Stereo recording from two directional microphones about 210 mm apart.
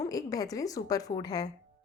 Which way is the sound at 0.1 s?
15° left (ahead or behind).